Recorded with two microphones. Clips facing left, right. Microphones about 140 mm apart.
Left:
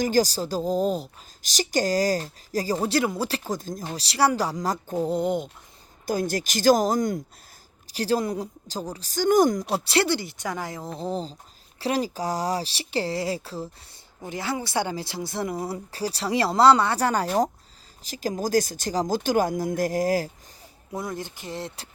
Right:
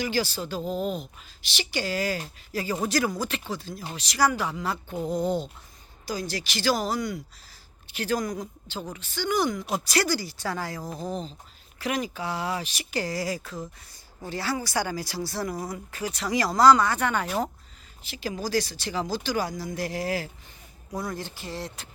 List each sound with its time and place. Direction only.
0.0 s speech: 40° left (ahead or behind)
3.9 s speech: 30° left (ahead or behind)
6.1 s speech: 50° left (ahead or behind)
7.9 s speech: 35° left (ahead or behind)
9.7 s speech: 30° left (ahead or behind)
14.2 s speech: 20° left (ahead or behind); by 20.3 s 40° left (ahead or behind)
20.9 s speech: 20° left (ahead or behind)